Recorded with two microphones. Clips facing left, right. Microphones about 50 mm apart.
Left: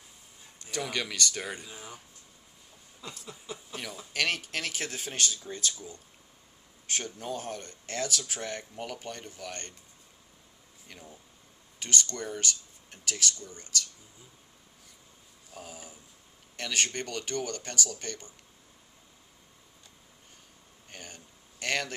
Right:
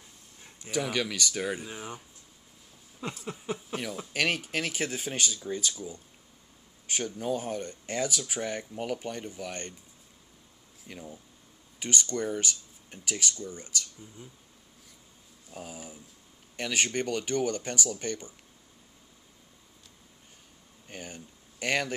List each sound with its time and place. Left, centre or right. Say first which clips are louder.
0.6 s speech: right 4 dB; centre
1.7 s speech: right 5 dB; right
3.0 s speech: right 7 dB; right
3.5 s speech: right 5 dB; centre
6.9 s speech: right 4 dB; centre
10.8 s speech: right 6 dB; centre
15.5 s speech: right 3 dB; centre
20.9 s speech: right 5 dB; centre